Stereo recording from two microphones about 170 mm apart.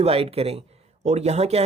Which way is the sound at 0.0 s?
35° right (ahead or behind).